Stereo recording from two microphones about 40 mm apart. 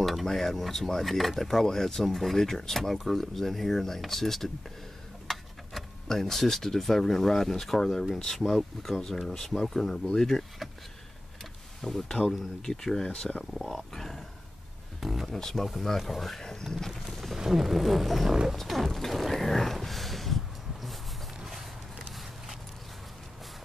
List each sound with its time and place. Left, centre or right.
0.0 s speech: centre
11.8 s speech: centre
13.5 s speech: centre
13.9 s speech: centre
15.0 s speech: centre
15.3 s speech: centre
17.1 s wild animals: centre
17.4 s speech: centre
18.3 s speech: centre
18.6 s mechanisms: centre
21.4 s a sound: centre